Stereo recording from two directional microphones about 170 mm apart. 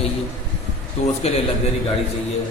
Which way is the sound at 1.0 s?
40° left (ahead or behind).